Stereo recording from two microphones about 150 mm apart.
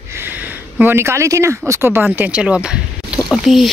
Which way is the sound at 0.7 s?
15° right (ahead or behind).